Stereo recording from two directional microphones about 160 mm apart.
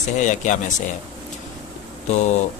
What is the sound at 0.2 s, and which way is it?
Speech, 50° left (ahead or behind).